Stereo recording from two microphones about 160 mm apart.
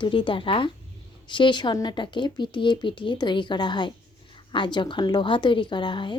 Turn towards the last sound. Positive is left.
turn(degrees=30)  # may be behind; listen again after turning